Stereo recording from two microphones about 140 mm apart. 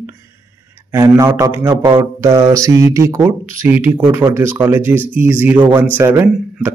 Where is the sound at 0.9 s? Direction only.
20° right (ahead or behind).